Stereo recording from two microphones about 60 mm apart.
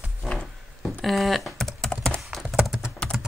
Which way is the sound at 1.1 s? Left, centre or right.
Centre.